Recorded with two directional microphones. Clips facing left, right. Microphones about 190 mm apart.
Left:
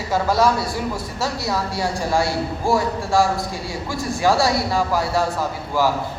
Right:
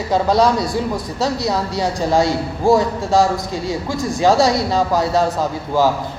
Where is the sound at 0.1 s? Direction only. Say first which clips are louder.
Right 3 dB; 20° right (ahead or behind).